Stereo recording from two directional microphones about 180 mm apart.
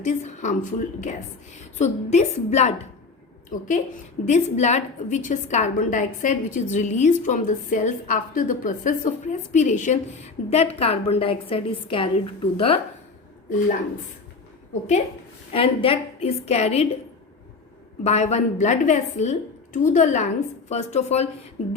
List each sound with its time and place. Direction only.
0.0 s a woman's voice: 40° left (ahead or behind)
14.7 s a woman's voice: 40° left (ahead or behind)
18.0 s a woman's voice: 35° left (ahead or behind)